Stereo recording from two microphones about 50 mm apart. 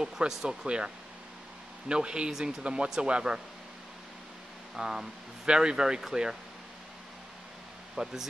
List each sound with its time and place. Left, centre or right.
0.3 s speech: centre
4.7 s speech: centre
7.9 s speech: centre